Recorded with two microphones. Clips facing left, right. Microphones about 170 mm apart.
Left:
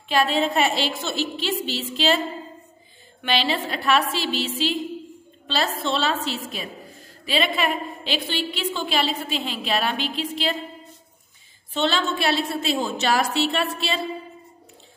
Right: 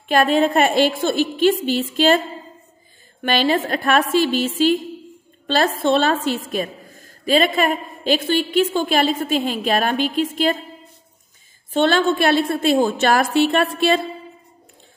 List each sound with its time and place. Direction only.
0.1 s a woman's voice: 50° right (ahead or behind)
11.7 s a woman's voice: 50° right (ahead or behind)